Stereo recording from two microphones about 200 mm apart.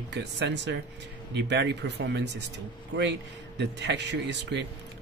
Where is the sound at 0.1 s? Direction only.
60° right (ahead or behind).